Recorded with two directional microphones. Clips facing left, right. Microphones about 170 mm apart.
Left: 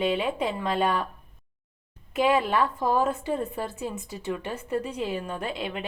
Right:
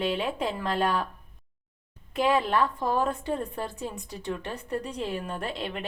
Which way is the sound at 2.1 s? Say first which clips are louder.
Left 1 dB; centre (ahead or behind).